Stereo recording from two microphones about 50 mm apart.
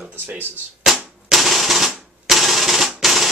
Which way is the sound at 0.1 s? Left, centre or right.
Right.